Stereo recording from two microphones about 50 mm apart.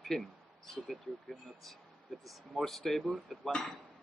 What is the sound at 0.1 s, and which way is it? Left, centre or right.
Speech, centre.